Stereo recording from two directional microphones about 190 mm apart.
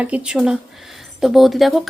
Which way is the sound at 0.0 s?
5° right (ahead or behind).